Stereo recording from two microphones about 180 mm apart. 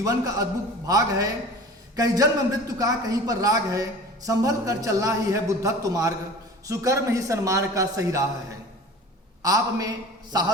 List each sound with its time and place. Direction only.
0.0 s a man's voice: 20° right (ahead or behind)
9.4 s a man's voice: 20° right (ahead or behind)